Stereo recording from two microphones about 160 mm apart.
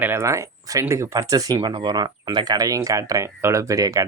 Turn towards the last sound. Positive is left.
turn(degrees=-20)  # may be behind; listen again after turning